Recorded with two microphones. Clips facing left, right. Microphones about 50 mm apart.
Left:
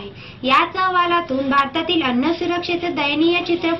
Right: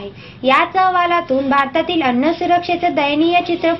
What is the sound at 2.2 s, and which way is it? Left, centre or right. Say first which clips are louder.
A woman's voice: right 5 dB; right.